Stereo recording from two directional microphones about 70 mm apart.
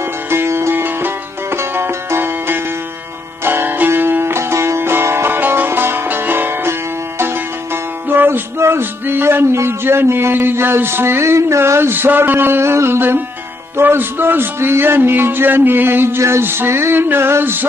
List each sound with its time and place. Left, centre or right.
0.3 s music: right
13.7 s a man's voice: right